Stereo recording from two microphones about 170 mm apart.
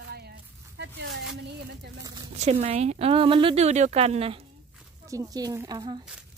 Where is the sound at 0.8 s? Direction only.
90° right.